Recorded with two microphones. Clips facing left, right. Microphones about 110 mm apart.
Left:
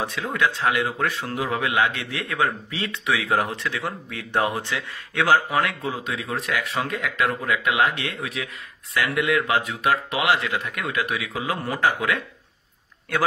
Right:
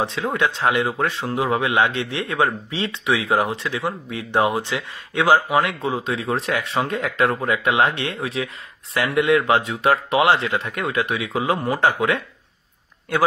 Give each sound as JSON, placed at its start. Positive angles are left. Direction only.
{"t": 0.0, "sound": "speech", "side_deg": -25}